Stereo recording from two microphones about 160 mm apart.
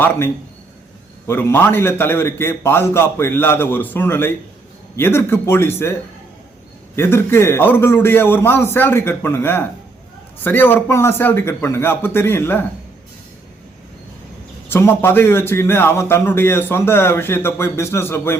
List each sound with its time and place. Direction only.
1.3 s speech: 15° left (ahead or behind)
6.9 s speech: 15° left (ahead or behind)
14.7 s speech: 15° left (ahead or behind)